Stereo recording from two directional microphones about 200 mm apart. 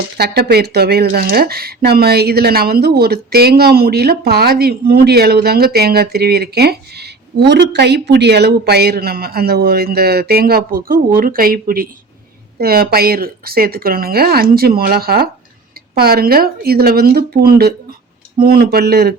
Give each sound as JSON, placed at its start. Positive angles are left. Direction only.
{"t": 0.2, "sound": "speech", "side_deg": -50}